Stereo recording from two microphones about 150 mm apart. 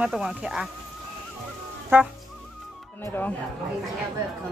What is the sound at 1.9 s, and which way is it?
Speech, 15° right (ahead or behind).